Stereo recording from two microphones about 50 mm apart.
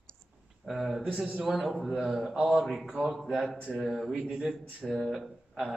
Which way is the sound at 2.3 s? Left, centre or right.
Centre.